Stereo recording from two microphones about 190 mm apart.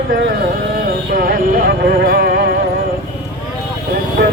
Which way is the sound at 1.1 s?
50° right (ahead or behind).